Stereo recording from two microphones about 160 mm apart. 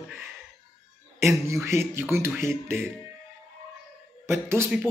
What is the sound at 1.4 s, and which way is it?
Speech, 15° right (ahead or behind).